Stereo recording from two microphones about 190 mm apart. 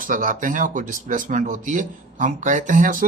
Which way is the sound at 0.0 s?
45° right (ahead or behind).